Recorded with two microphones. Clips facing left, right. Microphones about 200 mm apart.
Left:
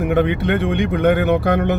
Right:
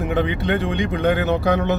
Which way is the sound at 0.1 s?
60° left (ahead or behind).